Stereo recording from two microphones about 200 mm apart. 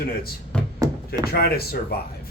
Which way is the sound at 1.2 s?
50° left (ahead or behind).